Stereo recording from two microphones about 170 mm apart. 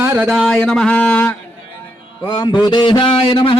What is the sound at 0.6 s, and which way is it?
Speech, 5° left (ahead or behind).